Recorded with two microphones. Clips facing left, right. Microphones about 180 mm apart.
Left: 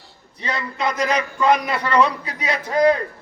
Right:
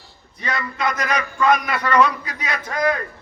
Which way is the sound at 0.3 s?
30° left (ahead or behind).